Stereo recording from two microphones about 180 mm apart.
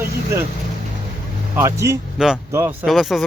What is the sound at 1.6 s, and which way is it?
Speech, 15° right (ahead or behind).